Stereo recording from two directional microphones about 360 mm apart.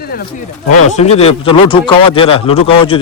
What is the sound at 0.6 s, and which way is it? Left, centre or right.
Speech, left.